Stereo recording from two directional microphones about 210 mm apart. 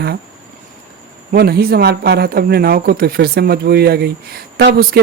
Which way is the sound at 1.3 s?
45° right (ahead or behind).